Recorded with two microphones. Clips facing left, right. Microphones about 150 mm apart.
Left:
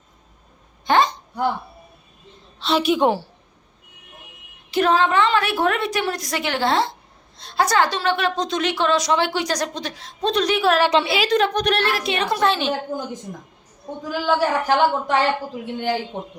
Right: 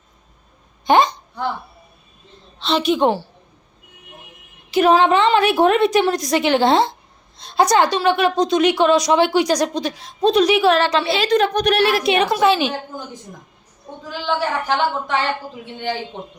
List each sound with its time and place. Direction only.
0.9 s a sound: 15° right (ahead or behind)
2.6 s a woman's voice: 5° left (ahead or behind)
4.7 s a woman's voice: 10° right (ahead or behind)
10.8 s a woman's voice: 15° left (ahead or behind)
11.3 s a woman's voice: centre (ahead or behind)
11.9 s a woman's voice: 15° right (ahead or behind)
14.1 s a woman's voice: 10° left (ahead or behind)